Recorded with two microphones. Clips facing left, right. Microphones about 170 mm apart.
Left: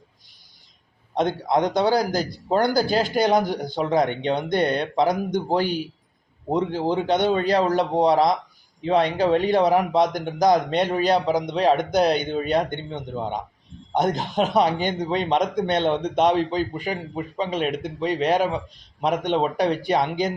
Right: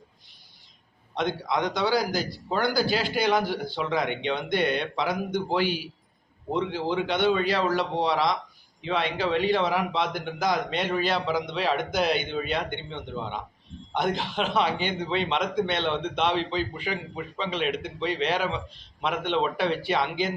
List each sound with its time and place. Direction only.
1.1 s a man's voice: 45° left (ahead or behind)